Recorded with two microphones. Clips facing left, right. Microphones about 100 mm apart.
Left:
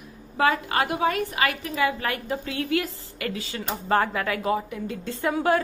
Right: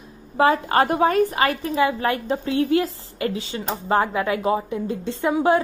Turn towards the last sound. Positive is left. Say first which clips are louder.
# right 4 dB
turn(degrees=-20)  # may be behind; listen again after turning